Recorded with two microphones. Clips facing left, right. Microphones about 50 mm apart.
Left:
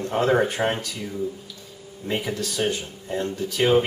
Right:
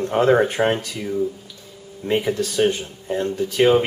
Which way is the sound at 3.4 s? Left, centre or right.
Centre.